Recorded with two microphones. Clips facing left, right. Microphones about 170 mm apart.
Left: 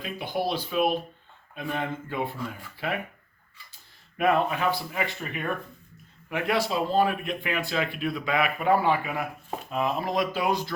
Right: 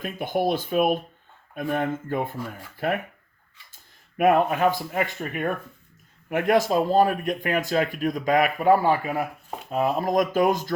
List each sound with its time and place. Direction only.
0.0 s speech: 50° right (ahead or behind)
4.2 s speech: 50° right (ahead or behind)